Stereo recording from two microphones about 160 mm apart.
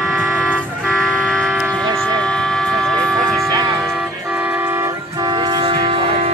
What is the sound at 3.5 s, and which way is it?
Music, 25° right (ahead or behind).